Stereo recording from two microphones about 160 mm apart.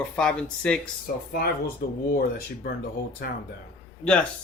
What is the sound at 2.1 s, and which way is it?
Speech, 70° left (ahead or behind).